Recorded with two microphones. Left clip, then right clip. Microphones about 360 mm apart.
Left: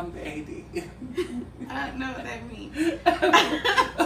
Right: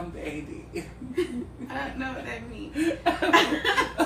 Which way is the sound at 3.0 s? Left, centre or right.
Centre.